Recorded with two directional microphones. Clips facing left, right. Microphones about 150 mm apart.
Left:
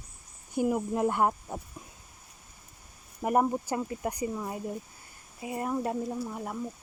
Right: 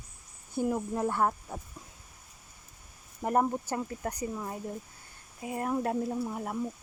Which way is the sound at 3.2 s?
10° left (ahead or behind).